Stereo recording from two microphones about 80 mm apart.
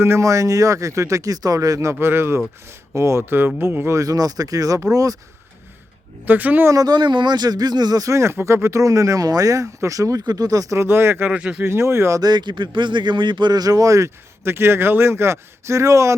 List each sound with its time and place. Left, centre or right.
0.0 s speech: right
3.9 s a man's voice: right
6.2 s speech: right
6.8 s a man's voice: right
10.8 s speech: right
11.3 s speech: centre
11.6 s speech: right
12.2 s a man's voice: right